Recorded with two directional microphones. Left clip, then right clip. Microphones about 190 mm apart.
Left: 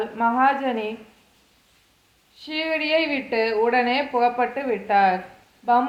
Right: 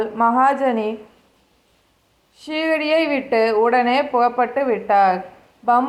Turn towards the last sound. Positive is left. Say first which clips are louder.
# right 3 dB
turn(degrees=-25)  # may be behind; listen again after turning